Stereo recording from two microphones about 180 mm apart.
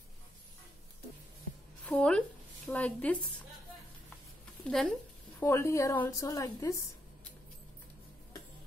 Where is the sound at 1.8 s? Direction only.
5° left (ahead or behind).